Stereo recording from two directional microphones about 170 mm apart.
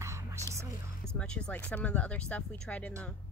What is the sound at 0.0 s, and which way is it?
Whispering, 15° right (ahead or behind).